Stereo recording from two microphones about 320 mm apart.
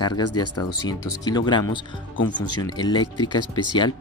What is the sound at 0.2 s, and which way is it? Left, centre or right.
Speech, left.